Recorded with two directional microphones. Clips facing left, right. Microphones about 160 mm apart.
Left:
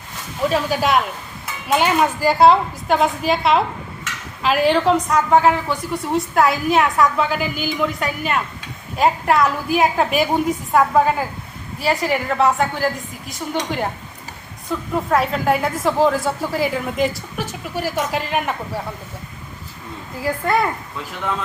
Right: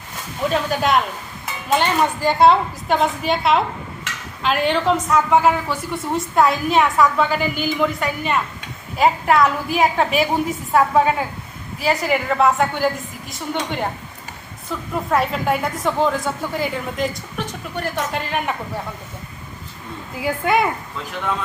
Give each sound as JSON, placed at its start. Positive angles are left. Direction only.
{"t": 0.4, "sound": "a woman's voice", "side_deg": 0}
{"t": 15.1, "sound": "a woman's voice", "side_deg": 0}
{"t": 20.2, "sound": "a woman's voice", "side_deg": 0}